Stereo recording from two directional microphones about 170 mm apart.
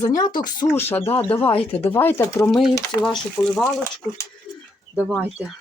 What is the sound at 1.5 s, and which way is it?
Speech, 35° left (ahead or behind).